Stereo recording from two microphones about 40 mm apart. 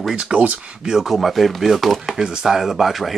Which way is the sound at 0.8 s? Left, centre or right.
Centre.